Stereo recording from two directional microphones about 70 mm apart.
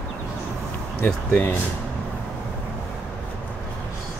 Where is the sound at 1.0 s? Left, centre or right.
Left.